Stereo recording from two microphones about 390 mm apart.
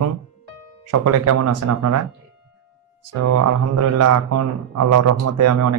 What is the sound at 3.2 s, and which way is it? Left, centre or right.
Speech, right.